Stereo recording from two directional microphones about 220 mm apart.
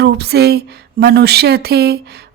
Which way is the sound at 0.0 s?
45° right (ahead or behind).